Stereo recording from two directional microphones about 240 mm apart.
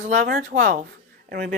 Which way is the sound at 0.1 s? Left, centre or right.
Right.